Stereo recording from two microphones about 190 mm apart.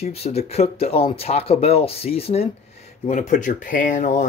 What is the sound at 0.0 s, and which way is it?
Speech, 30° left (ahead or behind).